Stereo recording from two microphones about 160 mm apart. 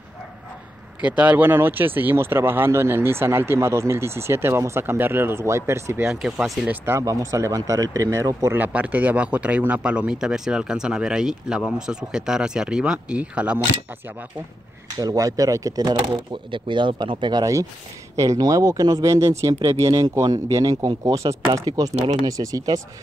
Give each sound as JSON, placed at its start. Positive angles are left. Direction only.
{"t": 1.0, "sound": "speech", "side_deg": -10}
{"t": 6.0, "sound": "speech", "side_deg": -5}
{"t": 6.9, "sound": "speech", "side_deg": -20}
{"t": 15.0, "sound": "speech", "side_deg": -20}